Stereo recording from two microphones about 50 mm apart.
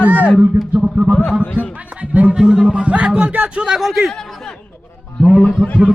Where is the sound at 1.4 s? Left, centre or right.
Left.